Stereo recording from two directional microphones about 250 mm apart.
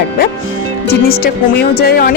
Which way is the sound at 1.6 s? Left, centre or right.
Left.